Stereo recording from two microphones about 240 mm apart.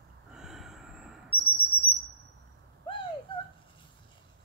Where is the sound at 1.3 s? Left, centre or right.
Left.